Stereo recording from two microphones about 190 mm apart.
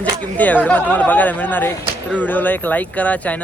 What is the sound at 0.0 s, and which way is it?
Speech, 10° left (ahead or behind).